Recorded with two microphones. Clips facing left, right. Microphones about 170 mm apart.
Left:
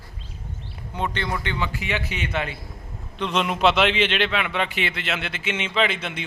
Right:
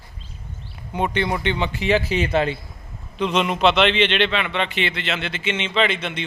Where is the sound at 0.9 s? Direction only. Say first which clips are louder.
Right 5 dB; 15° right (ahead or behind); by 2.5 s 35° right (ahead or behind).